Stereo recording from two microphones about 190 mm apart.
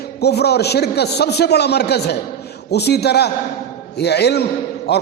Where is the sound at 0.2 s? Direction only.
60° left (ahead or behind).